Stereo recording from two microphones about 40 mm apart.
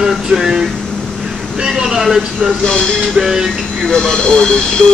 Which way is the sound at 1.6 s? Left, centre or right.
Centre.